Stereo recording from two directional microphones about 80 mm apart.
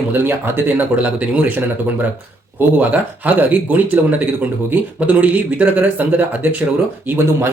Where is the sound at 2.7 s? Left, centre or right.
Right.